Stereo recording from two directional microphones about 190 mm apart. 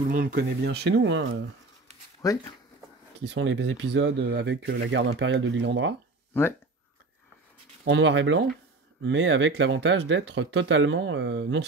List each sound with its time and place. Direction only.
0.1 s speech: 50° right (ahead or behind); by 1.3 s 75° right (ahead or behind)
2.2 s speech: 20° left (ahead or behind)
3.2 s speech: 70° right (ahead or behind)
7.8 s speech: 70° right (ahead or behind)